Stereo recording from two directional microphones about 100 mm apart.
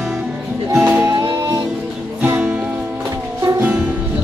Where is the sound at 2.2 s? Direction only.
20° right (ahead or behind).